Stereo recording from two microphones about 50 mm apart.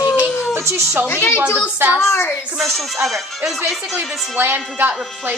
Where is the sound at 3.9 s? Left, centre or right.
Right.